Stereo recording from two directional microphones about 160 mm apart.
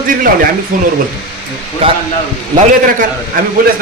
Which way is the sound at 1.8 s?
35° right (ahead or behind).